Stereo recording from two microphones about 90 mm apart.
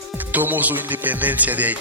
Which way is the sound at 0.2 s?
20° right (ahead or behind).